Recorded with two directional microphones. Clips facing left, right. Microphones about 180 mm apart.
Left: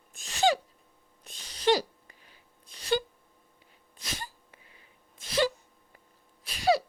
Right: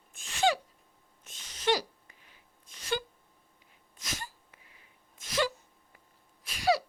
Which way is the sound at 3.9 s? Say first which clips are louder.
Left 1 dB; 30° left (ahead or behind).